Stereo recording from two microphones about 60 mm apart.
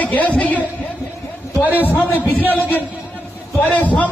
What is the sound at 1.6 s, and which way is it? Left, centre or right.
Speech, left.